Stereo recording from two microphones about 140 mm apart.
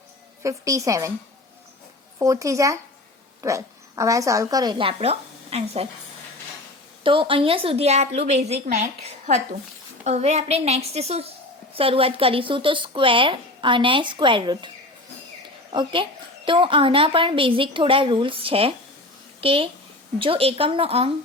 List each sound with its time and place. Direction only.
0.4 s a woman's voice: 25° right (ahead or behind)
2.1 s a woman's voice: 25° right (ahead or behind); by 5.9 s 45° right (ahead or behind)
7.0 s a woman's voice: 40° right (ahead or behind)
15.7 s speech: 35° right (ahead or behind)